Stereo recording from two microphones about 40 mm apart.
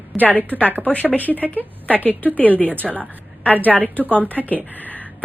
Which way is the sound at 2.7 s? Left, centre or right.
Right.